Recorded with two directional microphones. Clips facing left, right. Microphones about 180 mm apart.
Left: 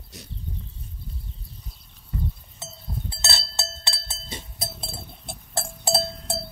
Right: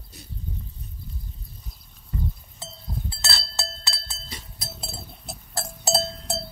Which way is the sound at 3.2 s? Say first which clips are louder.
Left 1 dB; 25° left (ahead or behind).